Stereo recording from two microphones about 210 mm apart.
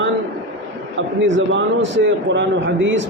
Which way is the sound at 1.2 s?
60° right (ahead or behind).